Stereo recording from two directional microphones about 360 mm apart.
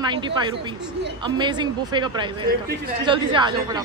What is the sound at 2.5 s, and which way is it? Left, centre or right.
Speech, right.